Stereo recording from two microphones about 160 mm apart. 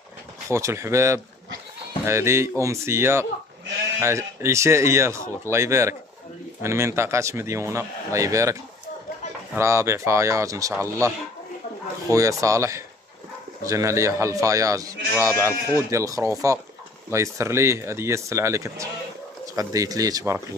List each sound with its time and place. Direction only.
0.5 s a man's voice: 20° right (ahead or behind)
9.6 s a man's voice: 15° right (ahead or behind)